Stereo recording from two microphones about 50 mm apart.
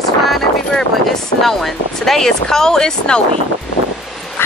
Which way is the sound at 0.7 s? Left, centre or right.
Centre.